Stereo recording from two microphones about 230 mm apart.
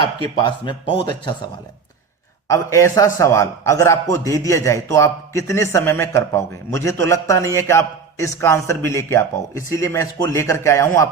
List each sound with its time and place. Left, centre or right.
0.3 s speech: centre
2.5 s a man's voice: centre